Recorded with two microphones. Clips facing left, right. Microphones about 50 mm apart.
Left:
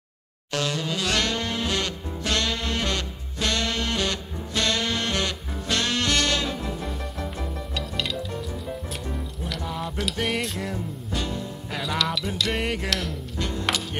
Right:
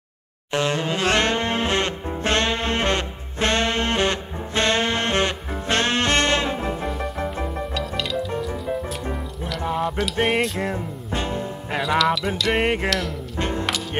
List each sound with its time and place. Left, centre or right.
0.5 s music: right
7.7 s music: centre
9.8 s music: centre
10.1 s music: right
12.0 s music: centre
12.5 s music: right